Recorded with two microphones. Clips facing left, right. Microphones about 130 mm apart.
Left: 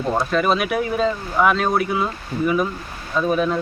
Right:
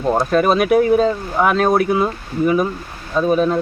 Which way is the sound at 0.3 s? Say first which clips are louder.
Right 5 dB; 45° right (ahead or behind).